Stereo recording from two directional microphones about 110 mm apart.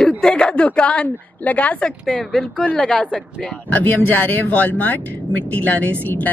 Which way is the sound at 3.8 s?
15° left (ahead or behind).